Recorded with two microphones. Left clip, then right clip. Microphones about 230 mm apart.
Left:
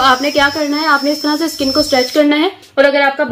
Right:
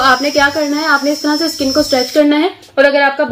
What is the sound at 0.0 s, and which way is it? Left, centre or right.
Speech, centre.